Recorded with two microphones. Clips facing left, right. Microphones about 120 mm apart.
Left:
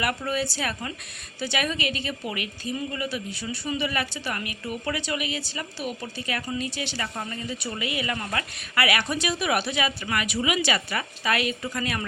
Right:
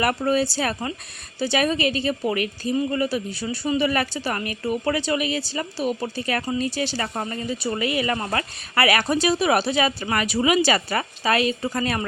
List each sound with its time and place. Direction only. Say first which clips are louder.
0.0 s speech: right 6 dB; 35° right (ahead or behind)